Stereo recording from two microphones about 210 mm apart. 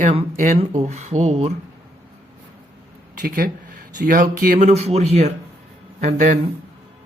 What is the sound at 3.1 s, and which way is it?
Speech, 45° right (ahead or behind).